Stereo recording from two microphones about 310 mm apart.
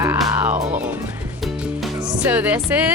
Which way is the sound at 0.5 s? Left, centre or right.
Right.